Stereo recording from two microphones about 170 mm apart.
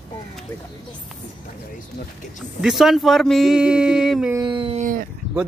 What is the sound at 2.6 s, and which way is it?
Speech, centre (ahead or behind).